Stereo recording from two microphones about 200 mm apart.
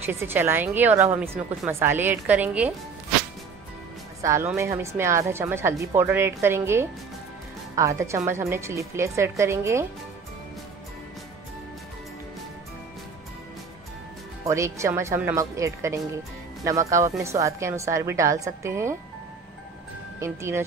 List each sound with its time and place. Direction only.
0.0 s speech: 10° right (ahead or behind)
4.2 s speech: 15° right (ahead or behind)
14.4 s speech: 15° right (ahead or behind)
20.2 s speech: 15° right (ahead or behind)